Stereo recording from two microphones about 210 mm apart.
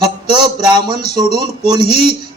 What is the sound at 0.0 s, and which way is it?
A man's voice, 20° right (ahead or behind).